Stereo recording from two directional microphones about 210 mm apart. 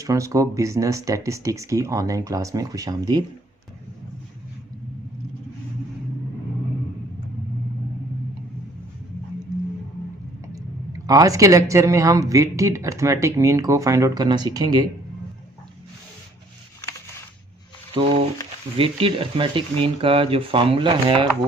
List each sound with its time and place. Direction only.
0.0 s speech: 15° right (ahead or behind)
10.5 s speech: 15° right (ahead or behind)
17.9 s a sound: 25° right (ahead or behind)
18.8 s speech: 25° right (ahead or behind)